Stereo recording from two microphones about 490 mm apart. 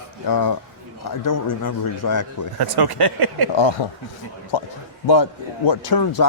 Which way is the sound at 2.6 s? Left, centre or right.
Right.